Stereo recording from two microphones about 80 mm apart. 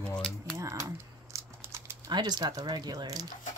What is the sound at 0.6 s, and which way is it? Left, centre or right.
Typing, right.